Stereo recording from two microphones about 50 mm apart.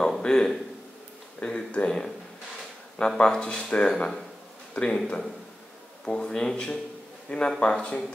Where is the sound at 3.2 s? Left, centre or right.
Centre.